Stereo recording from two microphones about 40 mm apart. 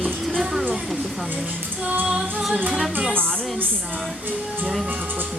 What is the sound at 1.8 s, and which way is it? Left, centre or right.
Music, right.